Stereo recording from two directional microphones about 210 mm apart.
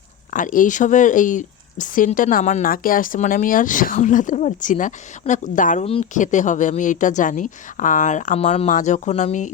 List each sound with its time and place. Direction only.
0.3 s speech: 40° left (ahead or behind)